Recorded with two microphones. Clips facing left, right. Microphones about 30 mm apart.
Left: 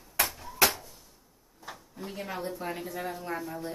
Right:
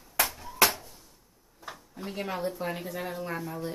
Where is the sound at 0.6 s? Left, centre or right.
Right.